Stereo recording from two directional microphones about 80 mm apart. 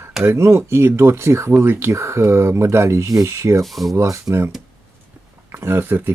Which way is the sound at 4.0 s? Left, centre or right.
Right.